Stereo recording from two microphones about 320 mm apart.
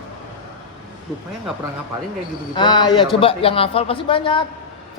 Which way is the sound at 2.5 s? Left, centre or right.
Centre.